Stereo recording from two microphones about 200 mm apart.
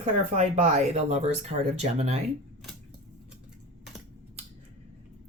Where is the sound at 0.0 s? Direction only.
35° right (ahead or behind).